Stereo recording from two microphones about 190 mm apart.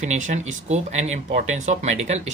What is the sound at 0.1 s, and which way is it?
Speech, 40° right (ahead or behind).